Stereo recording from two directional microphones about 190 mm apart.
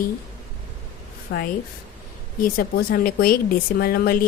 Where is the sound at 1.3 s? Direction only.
65° left (ahead or behind).